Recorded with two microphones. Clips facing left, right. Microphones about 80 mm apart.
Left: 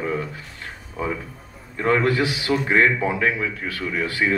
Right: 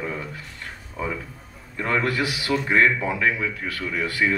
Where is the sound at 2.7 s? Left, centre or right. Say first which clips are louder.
Left 1 dB; centre.